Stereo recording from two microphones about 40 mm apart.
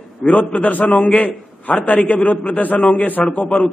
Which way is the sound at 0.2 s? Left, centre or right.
Left.